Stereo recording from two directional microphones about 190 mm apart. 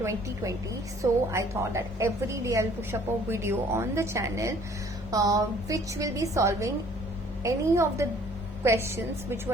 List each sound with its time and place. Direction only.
0.0 s a woman's voice: 15° right (ahead or behind)